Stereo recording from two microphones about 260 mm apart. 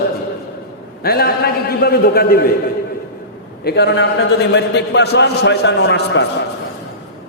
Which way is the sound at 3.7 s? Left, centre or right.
Left.